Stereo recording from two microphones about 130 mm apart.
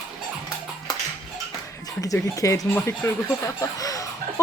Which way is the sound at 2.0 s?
25° left (ahead or behind).